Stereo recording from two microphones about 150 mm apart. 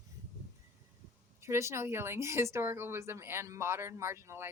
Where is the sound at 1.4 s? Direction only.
20° right (ahead or behind).